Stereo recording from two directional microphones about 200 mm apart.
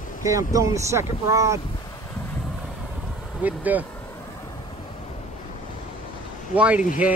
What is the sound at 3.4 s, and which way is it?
Speech, 10° right (ahead or behind).